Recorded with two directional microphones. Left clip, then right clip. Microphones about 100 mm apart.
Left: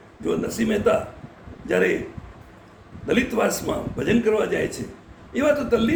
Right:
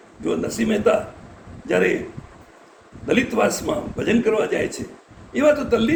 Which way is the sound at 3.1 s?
Centre (ahead or behind).